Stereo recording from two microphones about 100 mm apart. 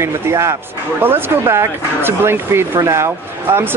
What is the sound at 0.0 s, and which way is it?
Speech, 30° right (ahead or behind).